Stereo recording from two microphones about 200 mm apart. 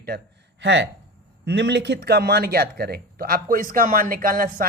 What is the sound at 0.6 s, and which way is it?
Speech, 65° right (ahead or behind).